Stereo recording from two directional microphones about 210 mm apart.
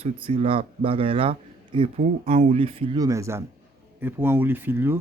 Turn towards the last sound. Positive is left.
turn(degrees=-10)  # may be behind; listen again after turning